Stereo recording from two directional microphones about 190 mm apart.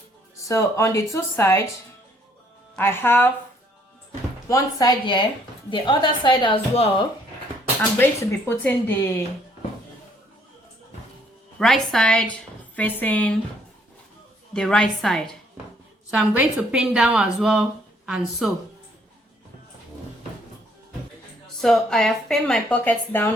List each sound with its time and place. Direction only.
0.3 s speech: 15° left (ahead or behind)
2.7 s speech: 10° left (ahead or behind)
4.4 s a woman's voice: 15° left (ahead or behind)
7.8 s speech: 10° left (ahead or behind)
11.6 s a woman's voice: centre (ahead or behind)
14.5 s a woman's voice: 5° left (ahead or behind)
21.6 s a woman's voice: centre (ahead or behind)